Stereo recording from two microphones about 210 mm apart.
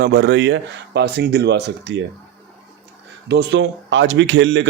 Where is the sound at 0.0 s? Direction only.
50° right (ahead or behind).